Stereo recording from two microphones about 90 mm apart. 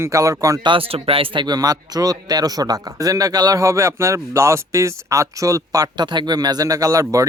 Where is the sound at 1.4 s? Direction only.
50° right (ahead or behind).